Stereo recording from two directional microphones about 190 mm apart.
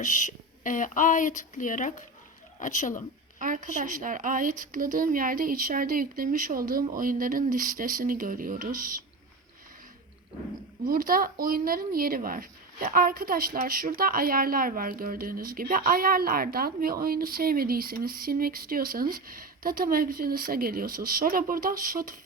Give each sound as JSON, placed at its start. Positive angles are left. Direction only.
{"t": 0.0, "sound": "speech", "side_deg": 40}
{"t": 3.3, "sound": "a woman's voice", "side_deg": -45}
{"t": 10.8, "sound": "speech", "side_deg": -50}